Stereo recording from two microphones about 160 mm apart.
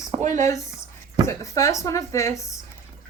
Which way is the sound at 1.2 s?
20° left (ahead or behind).